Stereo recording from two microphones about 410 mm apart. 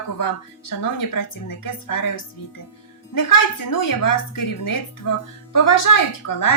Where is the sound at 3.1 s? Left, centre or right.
Left.